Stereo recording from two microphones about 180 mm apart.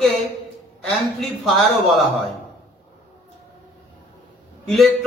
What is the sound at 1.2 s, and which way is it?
Speech, centre (ahead or behind).